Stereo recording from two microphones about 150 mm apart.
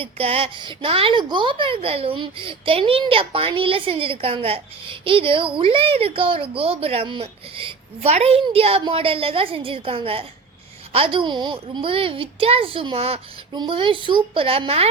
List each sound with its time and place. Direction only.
0.0 s a woman's voice: 40° right (ahead or behind)